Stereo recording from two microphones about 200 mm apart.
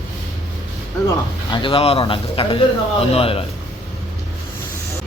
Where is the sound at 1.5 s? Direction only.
25° left (ahead or behind).